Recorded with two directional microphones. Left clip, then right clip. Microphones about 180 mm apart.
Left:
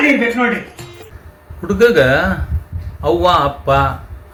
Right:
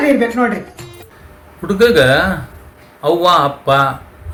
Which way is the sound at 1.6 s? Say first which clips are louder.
Right 1 dB; 10° left (ahead or behind).